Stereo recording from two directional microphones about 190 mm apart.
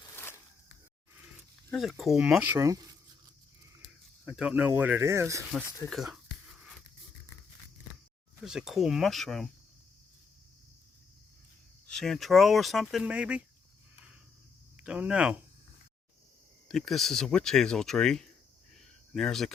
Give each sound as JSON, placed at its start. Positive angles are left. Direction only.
{"t": 1.7, "sound": "speech", "side_deg": 0}
{"t": 4.3, "sound": "speech", "side_deg": -5}
{"t": 5.9, "sound": "music", "side_deg": 0}
{"t": 8.4, "sound": "speech", "side_deg": -5}
{"t": 11.9, "sound": "speech", "side_deg": 0}
{"t": 14.8, "sound": "speech", "side_deg": -5}
{"t": 16.6, "sound": "speech", "side_deg": 0}
{"t": 18.7, "sound": "a sound", "side_deg": 0}